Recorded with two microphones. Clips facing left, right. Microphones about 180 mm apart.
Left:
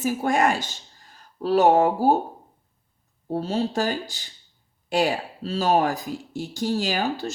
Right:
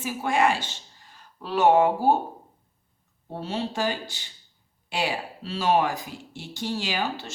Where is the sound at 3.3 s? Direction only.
40° left (ahead or behind).